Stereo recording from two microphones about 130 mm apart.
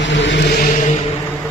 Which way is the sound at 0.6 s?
70° left (ahead or behind).